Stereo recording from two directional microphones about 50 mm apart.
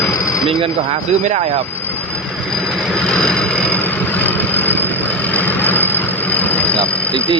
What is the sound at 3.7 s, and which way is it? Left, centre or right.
Vehicle, left.